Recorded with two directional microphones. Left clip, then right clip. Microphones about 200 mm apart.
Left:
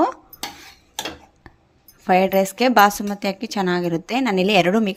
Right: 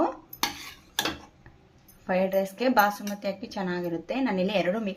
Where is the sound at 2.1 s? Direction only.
45° left (ahead or behind).